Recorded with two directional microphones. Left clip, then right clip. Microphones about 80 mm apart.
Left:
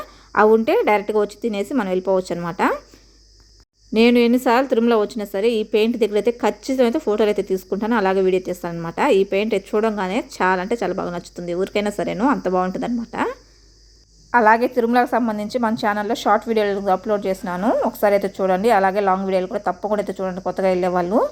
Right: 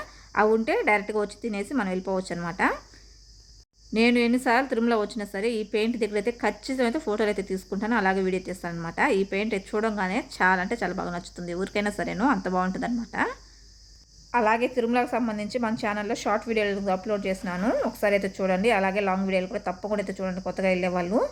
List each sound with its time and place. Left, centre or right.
0.3 s speech: left
3.9 s a woman's voice: left
14.3 s a woman's voice: left
14.8 s speech: left
17.6 s a woman's voice: centre
17.9 s speech: left